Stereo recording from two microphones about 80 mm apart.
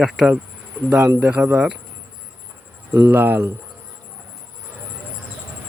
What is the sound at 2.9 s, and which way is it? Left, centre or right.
Speech, right.